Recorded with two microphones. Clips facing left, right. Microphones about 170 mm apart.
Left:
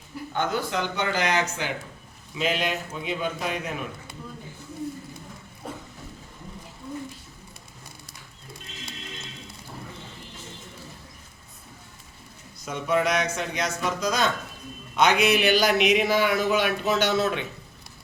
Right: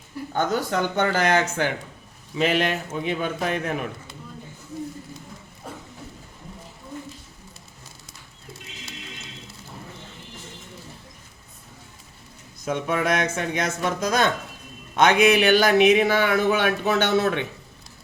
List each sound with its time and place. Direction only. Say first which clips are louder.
0.3 s speech: right 3 dB; 50° right (ahead or behind)
12.7 s speech: even; 55° right (ahead or behind)